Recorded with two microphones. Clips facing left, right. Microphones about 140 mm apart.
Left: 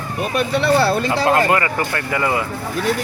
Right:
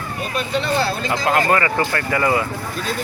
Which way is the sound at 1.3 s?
30° left (ahead or behind).